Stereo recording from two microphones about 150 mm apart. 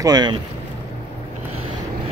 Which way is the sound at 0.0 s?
25° right (ahead or behind).